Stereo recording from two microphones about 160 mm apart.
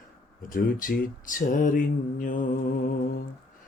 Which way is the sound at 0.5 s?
60° left (ahead or behind).